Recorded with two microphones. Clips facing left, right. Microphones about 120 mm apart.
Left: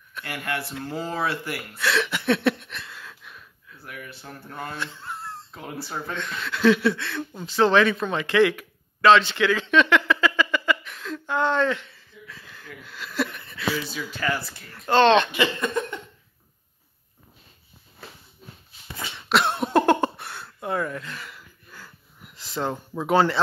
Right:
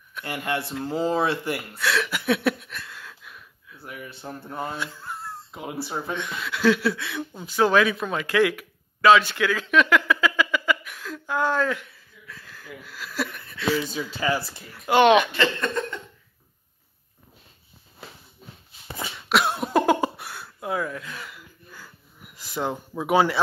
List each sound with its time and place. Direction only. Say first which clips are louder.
0.2 s speech: right 2 dB; 20° right (ahead or behind)
1.8 s a sound: left 3 dB; centre (ahead or behind)
3.8 s speech: right 3 dB; 20° right (ahead or behind); by 5.4 s 5° right (ahead or behind)
5.5 s speech: right 4 dB; 15° right (ahead or behind)
12.3 s a sound: right 3 dB; centre (ahead or behind)
14.2 s speech: right 2 dB; 10° right (ahead or behind)
15.3 s speech: even; 10° left (ahead or behind)
19.1 s cough: left 1 dB; centre (ahead or behind)